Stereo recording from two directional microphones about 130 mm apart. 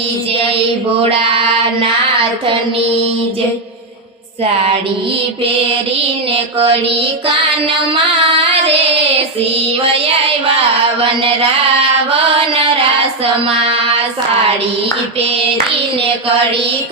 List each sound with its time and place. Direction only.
6.3 s music: 50° right (ahead or behind)
8.3 s child singing: 45° right (ahead or behind)
11.0 s music: 45° right (ahead or behind)